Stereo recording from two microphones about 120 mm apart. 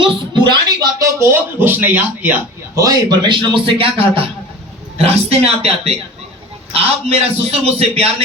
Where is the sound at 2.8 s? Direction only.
30° right (ahead or behind); by 5.7 s 60° right (ahead or behind).